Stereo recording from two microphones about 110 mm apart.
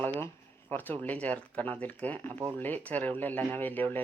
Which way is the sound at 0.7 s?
15° left (ahead or behind).